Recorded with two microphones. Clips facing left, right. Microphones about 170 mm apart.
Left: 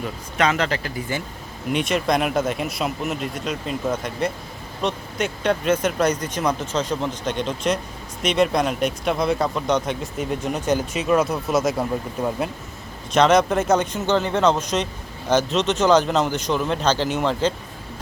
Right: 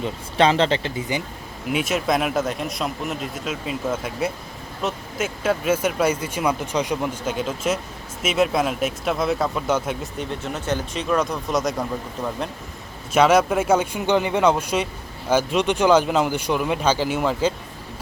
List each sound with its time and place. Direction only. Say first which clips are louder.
0.0 s speech: right 3 dB; 30° right (ahead or behind)
1.7 s speech: left 1 dB; 5° right (ahead or behind)
10.4 s speech: left 4 dB; 15° left (ahead or behind)
13.1 s speech: even; 10° right (ahead or behind)